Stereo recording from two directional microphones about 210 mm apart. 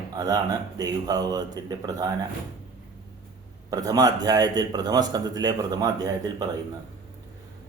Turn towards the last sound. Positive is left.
turn(degrees=-15)  # may be behind; listen again after turning